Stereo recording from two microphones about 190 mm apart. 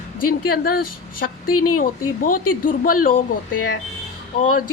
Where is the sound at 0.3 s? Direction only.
50° left (ahead or behind).